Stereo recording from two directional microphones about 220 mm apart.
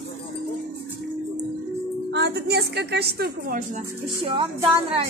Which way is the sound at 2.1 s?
50° right (ahead or behind).